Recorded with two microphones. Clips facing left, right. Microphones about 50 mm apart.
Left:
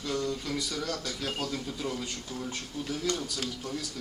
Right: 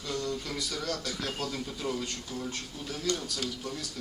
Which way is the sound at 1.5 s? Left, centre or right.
Centre.